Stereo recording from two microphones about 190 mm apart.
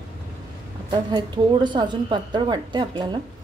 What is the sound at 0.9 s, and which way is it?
A woman's voice, 25° right (ahead or behind).